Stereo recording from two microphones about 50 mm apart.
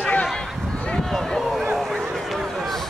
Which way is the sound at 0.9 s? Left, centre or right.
Centre.